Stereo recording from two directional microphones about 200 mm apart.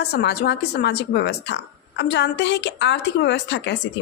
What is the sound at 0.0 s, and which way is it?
Speech, 55° left (ahead or behind).